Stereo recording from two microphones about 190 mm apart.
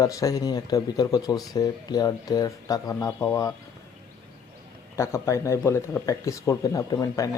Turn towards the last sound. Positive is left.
turn(degrees=20)  # may be behind; listen again after turning